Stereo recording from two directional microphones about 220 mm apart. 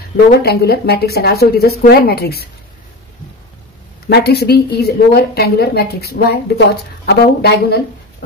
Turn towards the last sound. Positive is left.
turn(degrees=50)  # may be behind; listen again after turning